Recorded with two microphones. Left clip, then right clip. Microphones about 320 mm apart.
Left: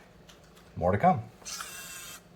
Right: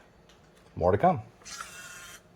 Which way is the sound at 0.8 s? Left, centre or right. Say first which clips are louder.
Right 1 dB; right.